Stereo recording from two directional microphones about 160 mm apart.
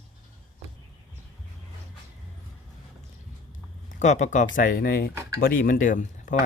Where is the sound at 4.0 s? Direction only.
45° left (ahead or behind).